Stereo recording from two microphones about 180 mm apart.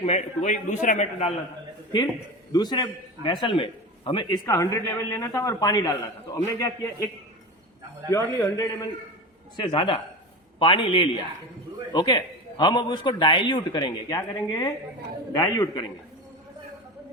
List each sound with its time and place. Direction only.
0.0 s a man's voice: 40° left (ahead or behind)
2.5 s a man's voice: 25° left (ahead or behind)
8.1 s a man's voice: 15° left (ahead or behind)